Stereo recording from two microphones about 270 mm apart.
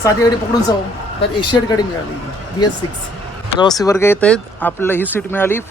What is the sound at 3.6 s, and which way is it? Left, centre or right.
Speech, centre.